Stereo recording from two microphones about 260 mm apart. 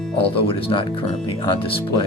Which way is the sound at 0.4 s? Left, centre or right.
Centre.